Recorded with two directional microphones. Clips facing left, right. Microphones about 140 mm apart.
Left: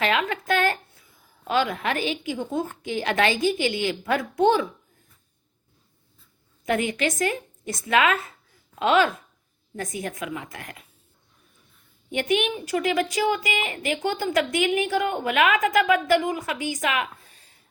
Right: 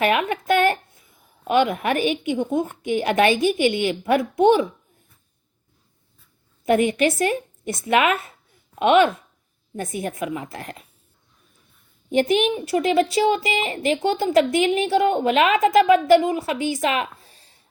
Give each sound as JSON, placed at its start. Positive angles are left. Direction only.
{"t": 0.0, "sound": "a woman's voice", "side_deg": -20}
{"t": 6.7, "sound": "a woman's voice", "side_deg": -30}
{"t": 12.5, "sound": "a woman's voice", "side_deg": -25}